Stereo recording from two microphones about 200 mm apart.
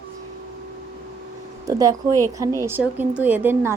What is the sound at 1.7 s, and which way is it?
Speech, 15° right (ahead or behind).